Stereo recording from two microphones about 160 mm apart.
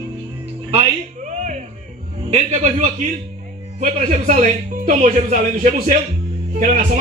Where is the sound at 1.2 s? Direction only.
50° right (ahead or behind).